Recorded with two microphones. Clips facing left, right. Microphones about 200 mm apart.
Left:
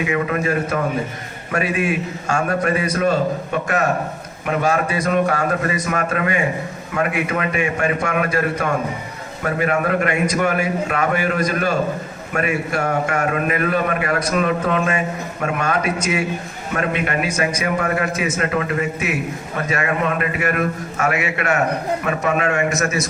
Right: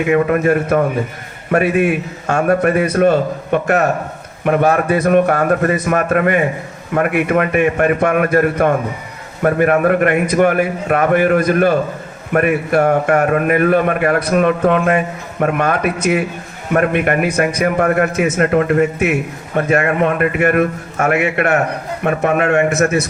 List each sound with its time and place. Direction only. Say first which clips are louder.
0.1 s a man's voice: right 11 dB; 50° right (ahead or behind)